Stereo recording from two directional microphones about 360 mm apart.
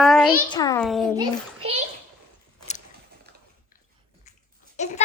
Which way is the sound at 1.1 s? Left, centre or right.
Centre.